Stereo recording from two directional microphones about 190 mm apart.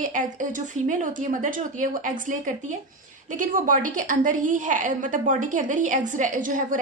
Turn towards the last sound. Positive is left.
turn(degrees=-45)  # may be behind; listen again after turning